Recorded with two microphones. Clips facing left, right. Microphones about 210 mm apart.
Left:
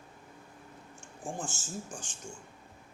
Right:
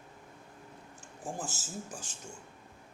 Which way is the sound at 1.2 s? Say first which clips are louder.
Left 1 dB; 5° right (ahead or behind).